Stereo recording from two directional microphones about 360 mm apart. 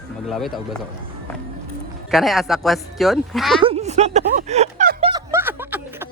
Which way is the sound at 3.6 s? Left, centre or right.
Centre.